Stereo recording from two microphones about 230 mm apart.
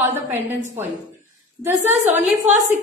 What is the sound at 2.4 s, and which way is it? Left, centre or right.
Speech, right.